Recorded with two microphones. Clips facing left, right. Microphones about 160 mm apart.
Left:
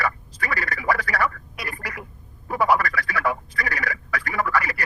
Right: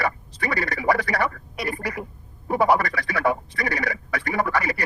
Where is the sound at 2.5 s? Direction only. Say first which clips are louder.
Right 2 dB; 25° right (ahead or behind).